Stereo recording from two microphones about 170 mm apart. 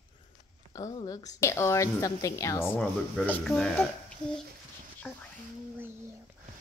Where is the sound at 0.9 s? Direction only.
20° left (ahead or behind).